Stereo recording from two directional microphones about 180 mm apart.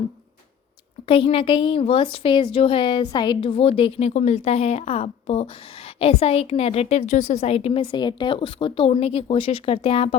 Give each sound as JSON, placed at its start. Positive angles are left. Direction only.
{"t": 1.0, "sound": "a woman's voice", "side_deg": 30}